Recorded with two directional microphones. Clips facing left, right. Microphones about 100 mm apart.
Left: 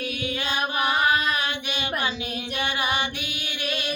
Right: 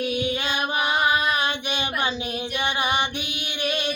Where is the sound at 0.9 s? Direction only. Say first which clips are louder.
Right 2 dB; 25° right (ahead or behind).